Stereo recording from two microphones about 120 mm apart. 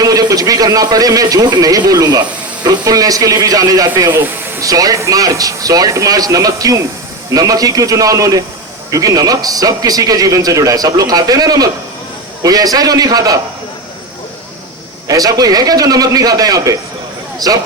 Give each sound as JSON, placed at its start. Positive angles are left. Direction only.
{"t": 0.0, "sound": "a man's voice", "side_deg": -30}
{"t": 15.0, "sound": "a man's voice", "side_deg": -30}